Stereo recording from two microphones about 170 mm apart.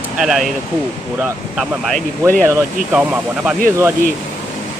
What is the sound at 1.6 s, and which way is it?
Speech, centre (ahead or behind).